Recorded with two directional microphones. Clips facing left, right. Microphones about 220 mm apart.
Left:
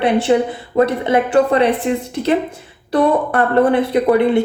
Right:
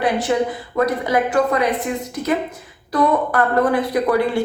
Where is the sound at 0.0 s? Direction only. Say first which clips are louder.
Left 4 dB; 25° left (ahead or behind).